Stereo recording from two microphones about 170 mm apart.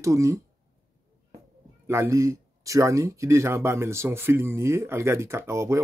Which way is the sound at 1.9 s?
15° right (ahead or behind).